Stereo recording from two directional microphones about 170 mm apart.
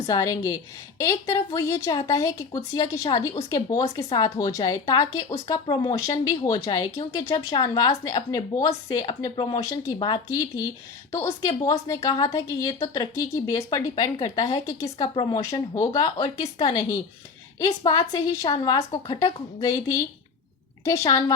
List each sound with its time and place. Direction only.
0.1 s speech: 20° left (ahead or behind)